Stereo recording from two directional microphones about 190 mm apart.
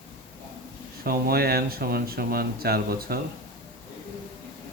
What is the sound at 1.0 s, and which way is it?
Speech, 50° right (ahead or behind).